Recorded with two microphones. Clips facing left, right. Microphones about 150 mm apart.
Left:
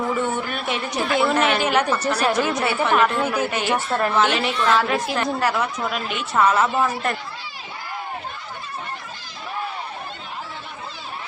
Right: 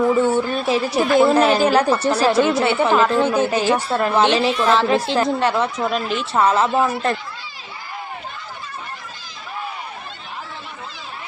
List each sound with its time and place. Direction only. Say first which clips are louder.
0.2 s a woman's voice: right 7 dB; 30° right (ahead or behind)